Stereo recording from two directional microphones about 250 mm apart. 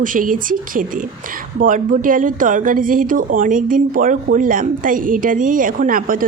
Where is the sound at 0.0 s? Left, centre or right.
Right.